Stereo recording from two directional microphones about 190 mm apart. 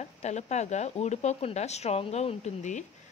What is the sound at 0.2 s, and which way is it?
Speech, 35° left (ahead or behind).